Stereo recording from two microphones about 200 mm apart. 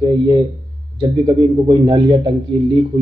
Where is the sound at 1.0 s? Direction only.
20° right (ahead or behind).